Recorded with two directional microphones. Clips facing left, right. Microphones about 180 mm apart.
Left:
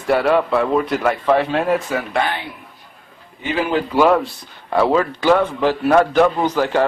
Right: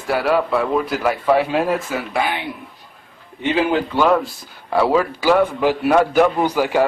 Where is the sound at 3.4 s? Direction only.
20° right (ahead or behind).